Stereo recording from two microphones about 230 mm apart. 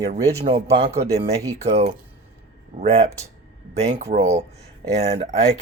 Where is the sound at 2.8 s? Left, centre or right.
Right.